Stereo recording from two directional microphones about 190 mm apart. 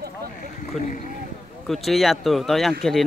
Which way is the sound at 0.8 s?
Centre (ahead or behind).